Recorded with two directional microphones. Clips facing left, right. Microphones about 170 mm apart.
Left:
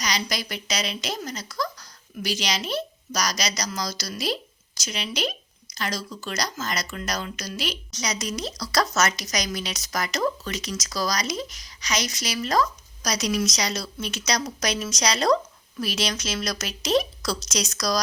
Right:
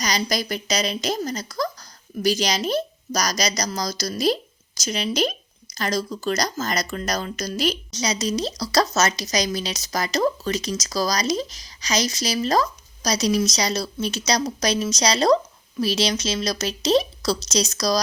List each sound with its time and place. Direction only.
0.0 s a woman's voice: 40° right (ahead or behind)
7.9 s a woman's voice: 30° right (ahead or behind)